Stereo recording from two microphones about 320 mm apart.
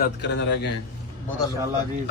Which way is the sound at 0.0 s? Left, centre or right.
Left.